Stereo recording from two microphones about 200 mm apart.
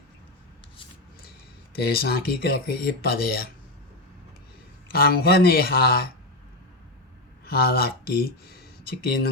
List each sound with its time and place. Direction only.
1.7 s speech: 50° left (ahead or behind)
4.9 s speech: 50° left (ahead or behind)
7.4 s speech: 50° left (ahead or behind)